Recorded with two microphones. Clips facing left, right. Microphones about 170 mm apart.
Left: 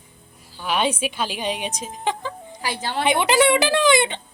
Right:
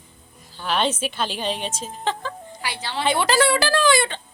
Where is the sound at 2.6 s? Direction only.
45° left (ahead or behind).